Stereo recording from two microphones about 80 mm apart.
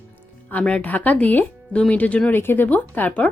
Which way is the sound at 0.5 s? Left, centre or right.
Centre.